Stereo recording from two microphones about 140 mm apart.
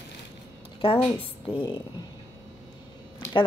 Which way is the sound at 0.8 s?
40° left (ahead or behind).